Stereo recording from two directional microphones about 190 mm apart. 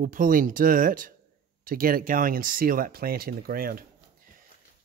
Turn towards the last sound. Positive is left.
turn(degrees=-50)  # may be behind; listen again after turning